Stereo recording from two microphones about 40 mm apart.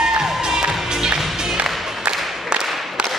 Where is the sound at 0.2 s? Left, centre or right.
Centre.